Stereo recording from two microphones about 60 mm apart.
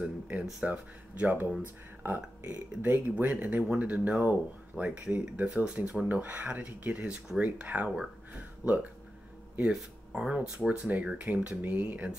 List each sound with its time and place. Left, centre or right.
0.0 s speech: right
5.5 s speech: centre
8.3 s a sound: right
10.1 s speech: centre